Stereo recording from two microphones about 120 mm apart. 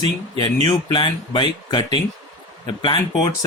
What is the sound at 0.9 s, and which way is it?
Speech, 40° left (ahead or behind).